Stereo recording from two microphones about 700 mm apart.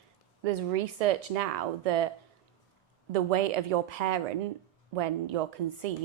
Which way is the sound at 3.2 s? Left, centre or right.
Right.